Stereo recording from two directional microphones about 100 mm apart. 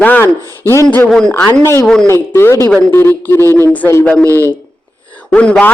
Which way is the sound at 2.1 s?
25° left (ahead or behind).